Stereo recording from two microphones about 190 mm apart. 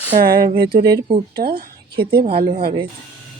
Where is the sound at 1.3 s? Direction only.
55° right (ahead or behind).